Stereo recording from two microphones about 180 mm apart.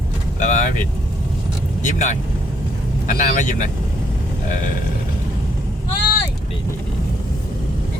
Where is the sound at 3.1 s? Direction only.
45° left (ahead or behind).